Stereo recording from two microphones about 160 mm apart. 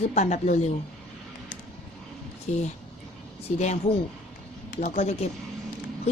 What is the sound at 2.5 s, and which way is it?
A woman's voice, 50° left (ahead or behind).